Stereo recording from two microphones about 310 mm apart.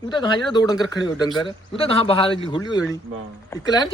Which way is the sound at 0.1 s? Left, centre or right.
Centre.